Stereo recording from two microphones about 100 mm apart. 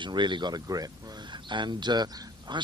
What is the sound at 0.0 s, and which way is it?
Speech, 50° right (ahead or behind).